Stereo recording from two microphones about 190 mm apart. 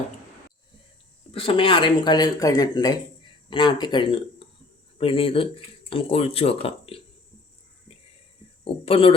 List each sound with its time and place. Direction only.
1.3 s speech: 30° left (ahead or behind)
7.9 s a sound: 30° left (ahead or behind)
8.6 s speech: 30° left (ahead or behind)